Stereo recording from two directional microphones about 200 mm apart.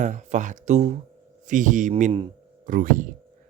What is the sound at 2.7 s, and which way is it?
Speech, 40° right (ahead or behind).